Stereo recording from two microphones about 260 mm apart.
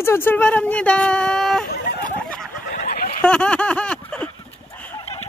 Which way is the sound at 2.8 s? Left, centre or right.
Left.